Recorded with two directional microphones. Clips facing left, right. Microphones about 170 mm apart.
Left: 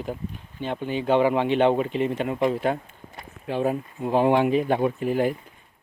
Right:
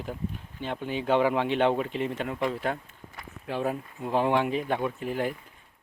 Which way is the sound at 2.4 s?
20° left (ahead or behind).